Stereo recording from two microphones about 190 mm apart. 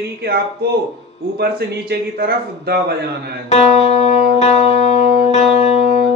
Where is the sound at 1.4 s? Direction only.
55° right (ahead or behind).